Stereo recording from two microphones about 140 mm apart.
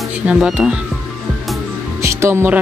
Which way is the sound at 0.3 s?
5° right (ahead or behind).